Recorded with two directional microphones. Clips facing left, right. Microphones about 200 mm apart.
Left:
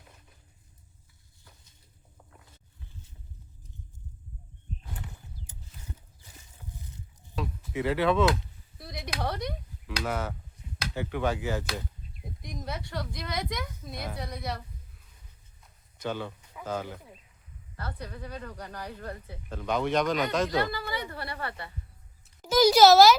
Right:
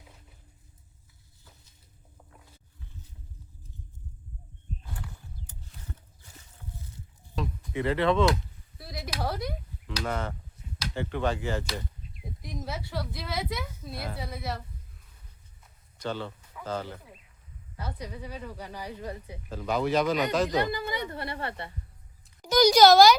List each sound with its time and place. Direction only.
7.3 s a sound: 5° left (ahead or behind)
9.8 s speech: 5° left (ahead or behind)
12.4 s a woman's voice: 5° right (ahead or behind)
16.0 s speech: 10° left (ahead or behind)
17.7 s a woman's voice: 10° right (ahead or behind)
20.6 s a woman's voice: 20° right (ahead or behind)
22.4 s a child's voice: 5° left (ahead or behind)